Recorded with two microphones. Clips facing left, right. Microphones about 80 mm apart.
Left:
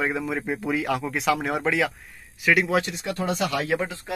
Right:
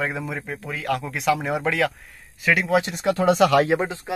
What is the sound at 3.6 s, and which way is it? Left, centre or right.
Speech, right.